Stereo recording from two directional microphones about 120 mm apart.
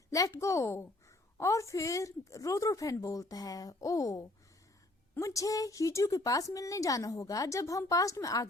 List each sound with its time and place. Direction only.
0.1 s a woman's voice: 30° left (ahead or behind)